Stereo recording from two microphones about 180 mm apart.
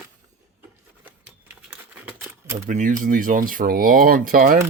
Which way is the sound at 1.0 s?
10° right (ahead or behind).